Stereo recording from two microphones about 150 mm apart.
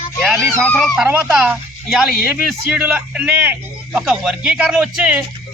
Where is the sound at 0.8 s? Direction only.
10° right (ahead or behind).